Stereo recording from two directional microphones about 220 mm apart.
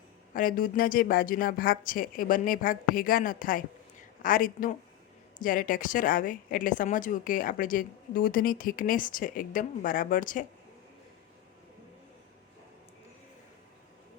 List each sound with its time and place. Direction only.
0.3 s a woman's voice: 40° left (ahead or behind)